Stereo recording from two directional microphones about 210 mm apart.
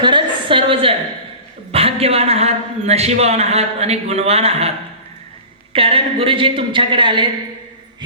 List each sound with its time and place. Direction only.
0.0 s a sound: 25° right (ahead or behind)
1.7 s a man's voice: 30° right (ahead or behind)
5.7 s a man's voice: 25° right (ahead or behind)